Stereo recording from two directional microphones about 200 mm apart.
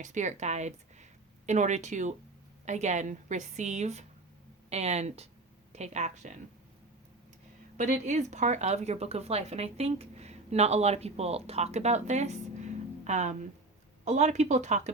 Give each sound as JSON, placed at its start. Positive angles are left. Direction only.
{"t": 0.0, "sound": "speech", "side_deg": -40}
{"t": 7.8, "sound": "speech", "side_deg": -40}